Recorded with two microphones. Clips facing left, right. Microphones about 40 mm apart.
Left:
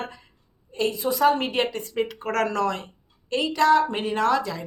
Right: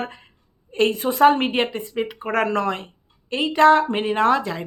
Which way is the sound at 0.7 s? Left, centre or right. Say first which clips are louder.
Right 4 dB; right.